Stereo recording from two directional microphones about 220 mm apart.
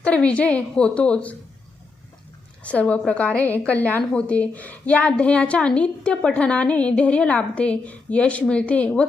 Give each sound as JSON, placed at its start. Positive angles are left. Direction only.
{"t": 0.0, "sound": "a woman's voice", "side_deg": 5}
{"t": 2.6, "sound": "a woman's voice", "side_deg": 5}